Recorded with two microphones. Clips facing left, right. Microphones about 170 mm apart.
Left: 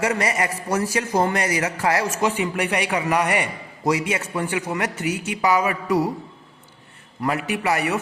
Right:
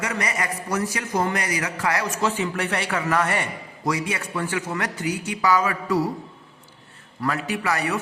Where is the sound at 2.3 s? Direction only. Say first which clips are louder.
Left 2 dB; 15° left (ahead or behind).